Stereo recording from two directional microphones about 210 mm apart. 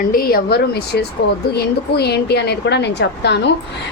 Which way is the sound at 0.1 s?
45° left (ahead or behind).